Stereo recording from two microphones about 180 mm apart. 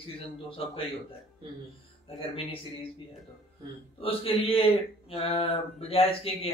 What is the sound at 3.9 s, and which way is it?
Speech, 30° left (ahead or behind).